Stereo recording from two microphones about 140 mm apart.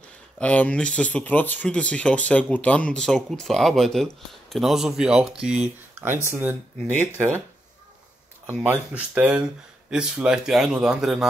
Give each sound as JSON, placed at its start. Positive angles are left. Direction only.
{"t": 0.4, "sound": "speech", "side_deg": 10}
{"t": 8.5, "sound": "speech", "side_deg": -10}